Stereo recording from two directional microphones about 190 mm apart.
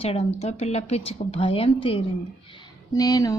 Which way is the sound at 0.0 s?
30° left (ahead or behind).